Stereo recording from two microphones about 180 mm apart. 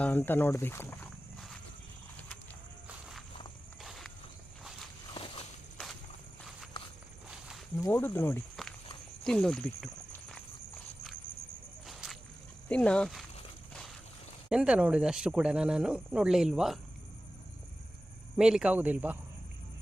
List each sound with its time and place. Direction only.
0.0 s speech: 10° left (ahead or behind)
3.8 s walk: centre (ahead or behind)
5.1 s walk: 30° left (ahead or behind)
7.9 s speech: 10° left (ahead or behind)
8.6 s walk: centre (ahead or behind)
9.2 s a sound: 5° left (ahead or behind)
11.9 s a sound: centre (ahead or behind)
12.6 s speech: 5° left (ahead or behind)
14.5 s speech: 5° right (ahead or behind)
18.3 s speech: 5° right (ahead or behind)